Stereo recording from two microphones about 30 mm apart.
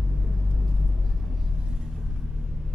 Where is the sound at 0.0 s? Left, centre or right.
Centre.